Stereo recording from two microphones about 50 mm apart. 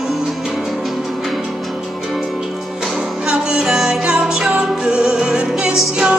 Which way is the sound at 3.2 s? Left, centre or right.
Centre.